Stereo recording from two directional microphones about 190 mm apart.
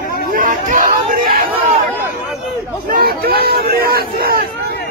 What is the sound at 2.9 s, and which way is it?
Crowd, 55° right (ahead or behind).